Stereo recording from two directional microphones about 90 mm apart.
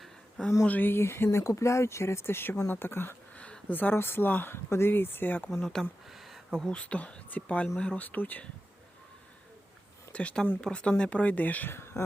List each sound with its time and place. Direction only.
0.0 s a sound: centre (ahead or behind)
0.6 s speech: 20° left (ahead or behind)
6.1 s speech: centre (ahead or behind); by 8.4 s 20° left (ahead or behind)
10.1 s speech: 15° left (ahead or behind)